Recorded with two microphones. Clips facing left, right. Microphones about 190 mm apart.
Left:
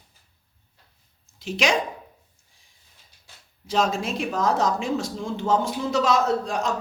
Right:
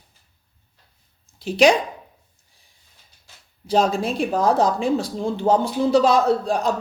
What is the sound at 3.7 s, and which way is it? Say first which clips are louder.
Speech: right 4 dB; 35° right (ahead or behind).